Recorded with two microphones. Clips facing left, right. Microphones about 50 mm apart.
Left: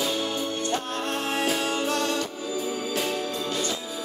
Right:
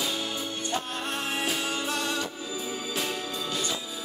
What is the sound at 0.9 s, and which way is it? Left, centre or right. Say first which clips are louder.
Music: left 4 dB; centre.